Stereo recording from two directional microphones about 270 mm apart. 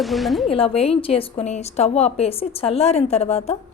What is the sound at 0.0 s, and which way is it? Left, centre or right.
Speech, centre.